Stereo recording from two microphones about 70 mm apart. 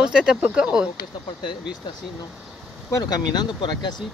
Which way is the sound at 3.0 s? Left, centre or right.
Left.